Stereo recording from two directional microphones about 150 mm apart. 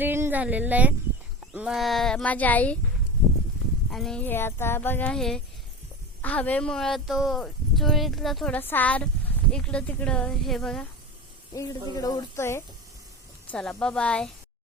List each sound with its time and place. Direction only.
0.0 s speech: 15° right (ahead or behind); by 2.7 s 10° left (ahead or behind)
3.8 s speech: 5° left (ahead or behind)
8.5 s speech: 10° left (ahead or behind)
11.5 s speech: 25° left (ahead or behind)
13.5 s speech: 5° left (ahead or behind)